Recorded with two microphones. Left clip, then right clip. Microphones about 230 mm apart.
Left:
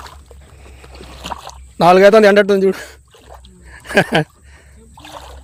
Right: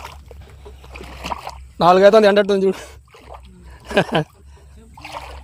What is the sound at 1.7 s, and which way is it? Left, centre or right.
Speech, left.